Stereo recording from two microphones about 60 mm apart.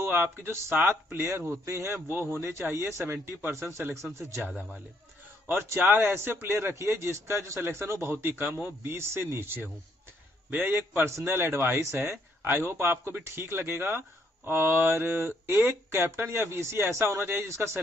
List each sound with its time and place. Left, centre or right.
0.0 s speech: right
1.7 s a man's voice: right
2.0 s a man's voice: right
5.5 s a man's voice: right
17.5 s a man's voice: right